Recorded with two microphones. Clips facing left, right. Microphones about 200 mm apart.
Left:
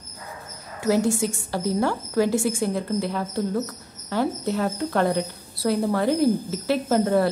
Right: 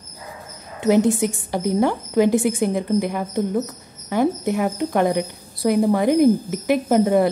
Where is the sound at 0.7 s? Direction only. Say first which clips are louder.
Right 5 dB; 20° right (ahead or behind).